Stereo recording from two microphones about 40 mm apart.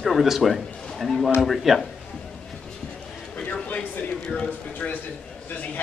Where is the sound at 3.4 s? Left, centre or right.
Left.